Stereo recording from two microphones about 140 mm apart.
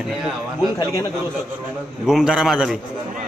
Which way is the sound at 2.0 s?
5° right (ahead or behind).